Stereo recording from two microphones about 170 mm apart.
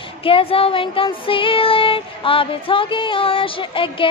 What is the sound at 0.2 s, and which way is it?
Child singing, 35° left (ahead or behind).